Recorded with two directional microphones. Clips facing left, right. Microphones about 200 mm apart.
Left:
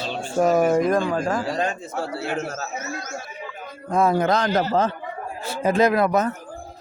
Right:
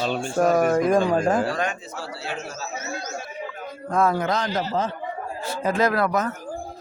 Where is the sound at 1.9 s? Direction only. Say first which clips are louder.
Left 6 dB; 55° left (ahead or behind).